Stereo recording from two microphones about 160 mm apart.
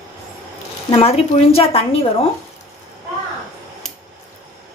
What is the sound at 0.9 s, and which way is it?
Speech, 35° left (ahead or behind).